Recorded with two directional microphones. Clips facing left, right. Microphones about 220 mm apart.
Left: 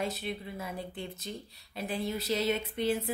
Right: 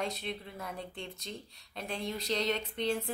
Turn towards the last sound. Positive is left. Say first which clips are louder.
# left 3 dB
turn(degrees=5)  # may be behind; listen again after turning